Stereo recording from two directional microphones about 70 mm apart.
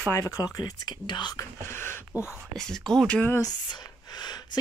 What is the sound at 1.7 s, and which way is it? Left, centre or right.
Speech, left.